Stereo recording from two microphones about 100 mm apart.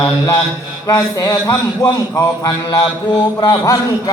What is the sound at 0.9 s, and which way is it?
Mantra, 40° left (ahead or behind).